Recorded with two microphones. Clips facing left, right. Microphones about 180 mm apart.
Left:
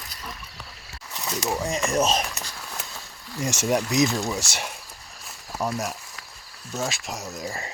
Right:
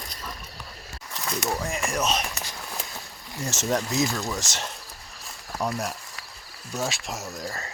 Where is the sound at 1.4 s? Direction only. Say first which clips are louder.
Left 4 dB; 20° left (ahead or behind).